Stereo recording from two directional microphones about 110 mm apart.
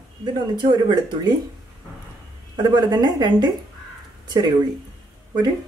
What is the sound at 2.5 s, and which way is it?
Speech, 40° right (ahead or behind).